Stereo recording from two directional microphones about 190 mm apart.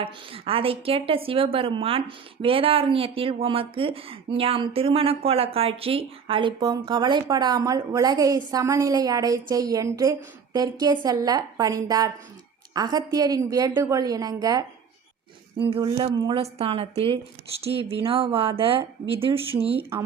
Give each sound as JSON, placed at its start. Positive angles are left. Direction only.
{"t": 0.0, "sound": "a woman's voice", "side_deg": -30}